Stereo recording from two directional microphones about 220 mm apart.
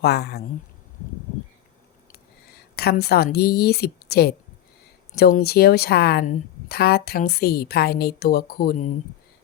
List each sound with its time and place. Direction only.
0.0 s a woman's voice: 45° left (ahead or behind)
2.7 s a woman's voice: 45° left (ahead or behind)